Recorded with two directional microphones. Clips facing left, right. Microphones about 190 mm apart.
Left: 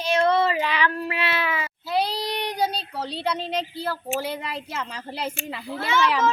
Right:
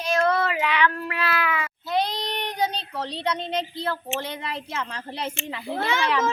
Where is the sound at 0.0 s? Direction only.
25° left (ahead or behind).